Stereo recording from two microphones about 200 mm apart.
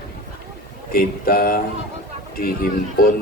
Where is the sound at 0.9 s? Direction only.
50° left (ahead or behind).